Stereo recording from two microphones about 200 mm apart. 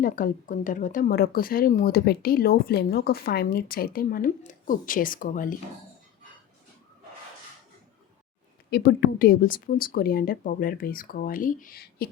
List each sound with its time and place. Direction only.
0.0 s speech: 45° left (ahead or behind)
8.7 s speech: 50° left (ahead or behind)